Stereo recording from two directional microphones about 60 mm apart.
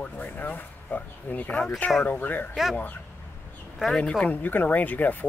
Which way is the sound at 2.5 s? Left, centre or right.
Centre.